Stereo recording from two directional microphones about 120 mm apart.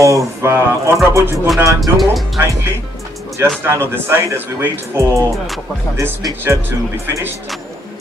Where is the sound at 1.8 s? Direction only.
Centre (ahead or behind).